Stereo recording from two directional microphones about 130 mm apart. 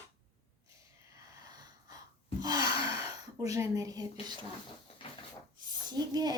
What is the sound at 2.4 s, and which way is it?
Gasp, 30° right (ahead or behind).